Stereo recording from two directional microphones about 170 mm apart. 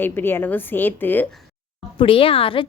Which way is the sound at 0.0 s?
15° left (ahead or behind).